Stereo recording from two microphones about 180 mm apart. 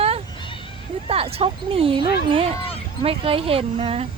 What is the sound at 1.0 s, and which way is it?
Speech, 30° right (ahead or behind).